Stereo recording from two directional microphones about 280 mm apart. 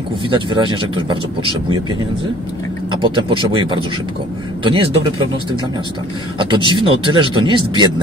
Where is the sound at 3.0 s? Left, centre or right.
Centre.